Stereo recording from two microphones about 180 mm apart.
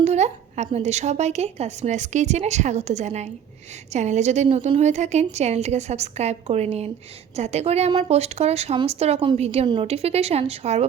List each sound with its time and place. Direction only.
0.0 s a woman's voice: 40° right (ahead or behind)